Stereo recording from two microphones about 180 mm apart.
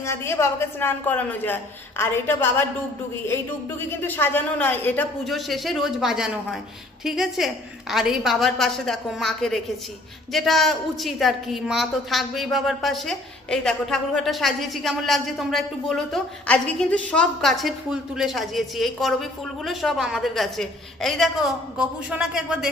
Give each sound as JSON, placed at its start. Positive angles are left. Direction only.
{"t": 0.0, "sound": "a woman's voice", "side_deg": 15}
{"t": 3.8, "sound": "a woman's voice", "side_deg": 10}